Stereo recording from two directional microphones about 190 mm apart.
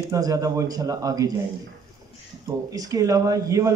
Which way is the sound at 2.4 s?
20° right (ahead or behind).